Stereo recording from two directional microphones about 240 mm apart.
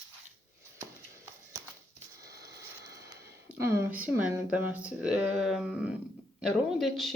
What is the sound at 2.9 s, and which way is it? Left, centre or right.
Speech, centre.